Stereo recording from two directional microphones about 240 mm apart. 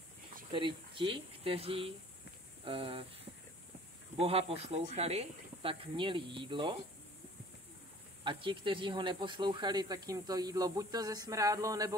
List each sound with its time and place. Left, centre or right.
0.5 s speech: centre
4.2 s speech: right
8.2 s speech: right